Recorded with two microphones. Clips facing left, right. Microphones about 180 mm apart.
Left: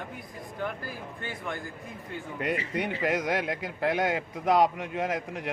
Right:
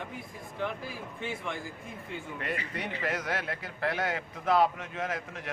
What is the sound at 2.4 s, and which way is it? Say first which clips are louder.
A man's voice: left 7 dB; 20° left (ahead or behind).